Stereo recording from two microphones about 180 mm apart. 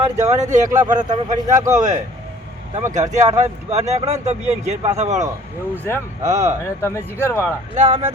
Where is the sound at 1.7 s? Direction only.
40° right (ahead or behind).